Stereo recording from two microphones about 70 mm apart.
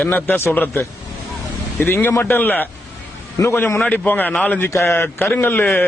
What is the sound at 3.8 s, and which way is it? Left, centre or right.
Speech, left.